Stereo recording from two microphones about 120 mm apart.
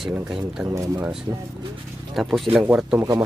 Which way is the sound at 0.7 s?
25° right (ahead or behind).